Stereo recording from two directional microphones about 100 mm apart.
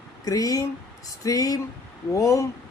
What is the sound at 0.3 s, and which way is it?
Speech, 35° left (ahead or behind).